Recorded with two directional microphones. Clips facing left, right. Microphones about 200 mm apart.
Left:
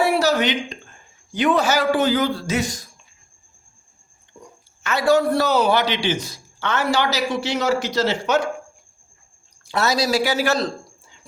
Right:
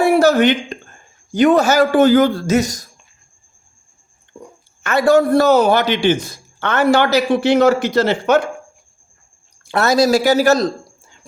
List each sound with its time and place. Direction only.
0.0 s speech: 50° right (ahead or behind)
4.4 s speech: 50° right (ahead or behind)
9.6 s speech: 55° right (ahead or behind)